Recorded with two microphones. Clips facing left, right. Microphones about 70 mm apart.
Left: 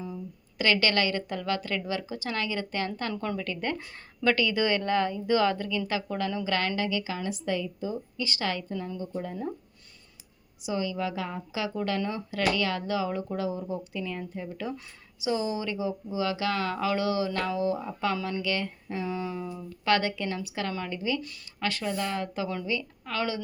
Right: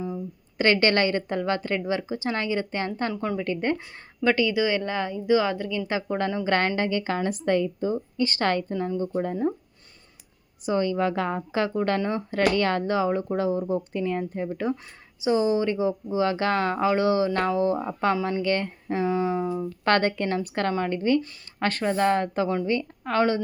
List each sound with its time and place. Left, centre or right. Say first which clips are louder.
0.6 s speech: right 4 dB; right
3.1 s speech: right 3 dB; centre
3.3 s speech: right 6 dB; right
4.2 s speech: right 3 dB; centre
5.9 s a woman's voice: right 4 dB; right
10.6 s a woman's voice: right 6 dB; right